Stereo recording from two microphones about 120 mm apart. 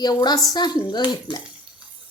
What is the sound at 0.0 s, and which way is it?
Speech, 35° left (ahead or behind).